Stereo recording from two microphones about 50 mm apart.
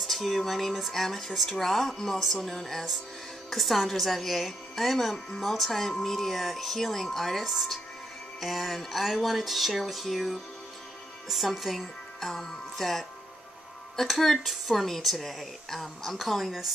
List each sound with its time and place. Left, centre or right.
0.0 s a woman's voice: centre
14.0 s a woman's voice: centre